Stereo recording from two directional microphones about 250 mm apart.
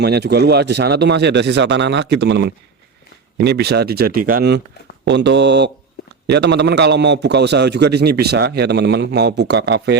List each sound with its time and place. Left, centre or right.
0.0 s a man's voice: right